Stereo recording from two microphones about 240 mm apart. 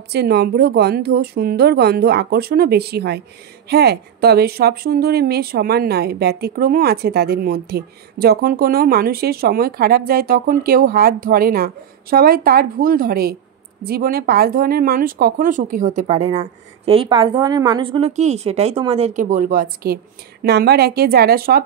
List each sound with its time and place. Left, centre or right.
0.1 s a woman's voice: right